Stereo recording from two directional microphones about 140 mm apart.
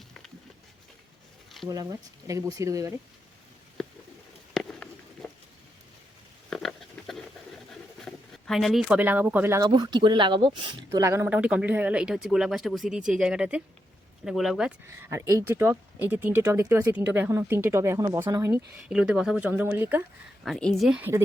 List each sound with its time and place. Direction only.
1.6 s speech: 25° right (ahead or behind)
4.5 s a sound: 5° left (ahead or behind)
6.5 s a sound: 5° left (ahead or behind)
7.7 s pigeon: 5° left (ahead or behind)
9.0 s speech: 10° right (ahead or behind)
9.6 s speech: 30° right (ahead or behind)
11.0 s speech: 20° right (ahead or behind); by 14.7 s centre (ahead or behind)
14.8 s speech: 20° right (ahead or behind)
18.5 s speech: 5° right (ahead or behind)
20.4 s speech: centre (ahead or behind)
21.0 s speech: 20° right (ahead or behind)